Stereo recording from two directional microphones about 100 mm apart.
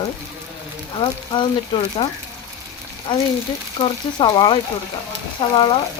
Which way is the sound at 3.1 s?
50° left (ahead or behind).